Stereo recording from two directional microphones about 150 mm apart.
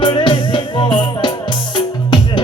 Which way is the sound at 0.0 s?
35° left (ahead or behind).